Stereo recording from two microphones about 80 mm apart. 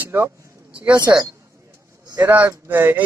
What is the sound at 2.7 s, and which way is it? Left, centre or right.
Speech, right.